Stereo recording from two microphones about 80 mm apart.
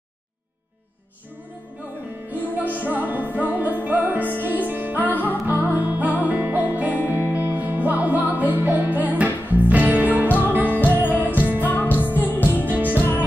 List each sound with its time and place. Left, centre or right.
2.3 s music: right
10.2 s music: left
10.5 s music: right
12.3 s music: left
12.6 s music: right